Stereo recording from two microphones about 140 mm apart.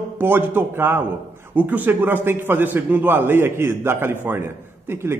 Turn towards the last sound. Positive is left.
turn(degrees=-15)  # may be behind; listen again after turning